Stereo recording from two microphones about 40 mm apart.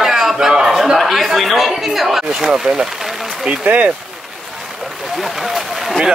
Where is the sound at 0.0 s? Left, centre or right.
Centre.